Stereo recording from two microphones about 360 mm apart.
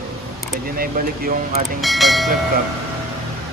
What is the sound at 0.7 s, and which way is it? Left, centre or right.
Speech, right.